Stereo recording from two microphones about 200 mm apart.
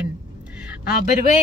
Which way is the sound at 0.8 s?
50° left (ahead or behind).